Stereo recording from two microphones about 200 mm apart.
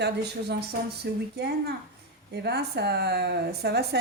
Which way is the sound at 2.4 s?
55° right (ahead or behind).